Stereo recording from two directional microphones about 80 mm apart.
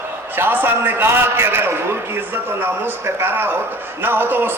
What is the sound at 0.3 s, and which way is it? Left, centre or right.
A man's voice, right.